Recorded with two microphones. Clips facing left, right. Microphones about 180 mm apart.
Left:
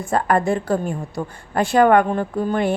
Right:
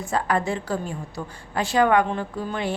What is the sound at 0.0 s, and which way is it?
A woman's voice, 50° left (ahead or behind).